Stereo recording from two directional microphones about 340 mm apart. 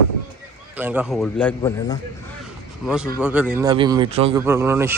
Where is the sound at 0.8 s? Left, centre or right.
Centre.